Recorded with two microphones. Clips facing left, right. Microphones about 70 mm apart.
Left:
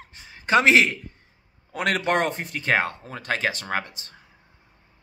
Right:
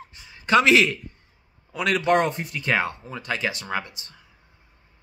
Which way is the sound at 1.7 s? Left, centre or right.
Left.